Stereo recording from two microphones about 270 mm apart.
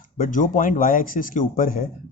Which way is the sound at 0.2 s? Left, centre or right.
Left.